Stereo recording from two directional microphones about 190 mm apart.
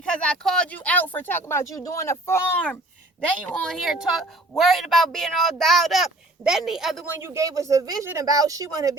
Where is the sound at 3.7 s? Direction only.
Centre (ahead or behind).